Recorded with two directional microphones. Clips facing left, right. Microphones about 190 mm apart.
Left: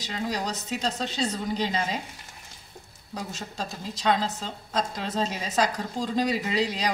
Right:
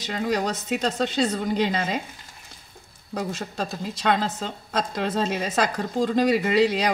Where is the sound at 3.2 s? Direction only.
55° right (ahead or behind).